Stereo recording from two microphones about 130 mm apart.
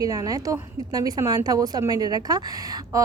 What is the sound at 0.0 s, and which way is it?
A woman's voice, 30° right (ahead or behind).